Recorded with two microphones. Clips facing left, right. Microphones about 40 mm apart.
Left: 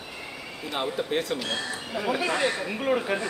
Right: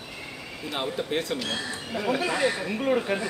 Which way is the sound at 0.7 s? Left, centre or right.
Centre.